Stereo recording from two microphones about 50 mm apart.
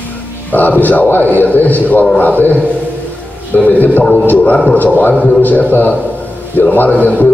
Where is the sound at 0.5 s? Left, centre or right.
Left.